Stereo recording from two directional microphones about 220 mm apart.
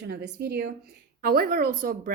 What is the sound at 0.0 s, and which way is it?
A woman's voice, 45° right (ahead or behind).